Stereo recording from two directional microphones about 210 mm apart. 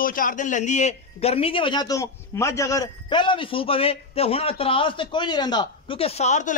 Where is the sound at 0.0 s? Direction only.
40° left (ahead or behind).